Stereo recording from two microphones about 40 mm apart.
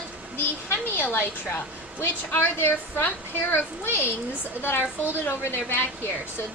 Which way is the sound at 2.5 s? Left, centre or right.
Left.